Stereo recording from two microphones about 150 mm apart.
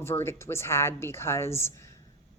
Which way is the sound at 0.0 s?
15° left (ahead or behind).